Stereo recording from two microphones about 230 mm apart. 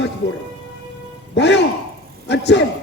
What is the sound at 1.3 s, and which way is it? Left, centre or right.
A man's voice, left.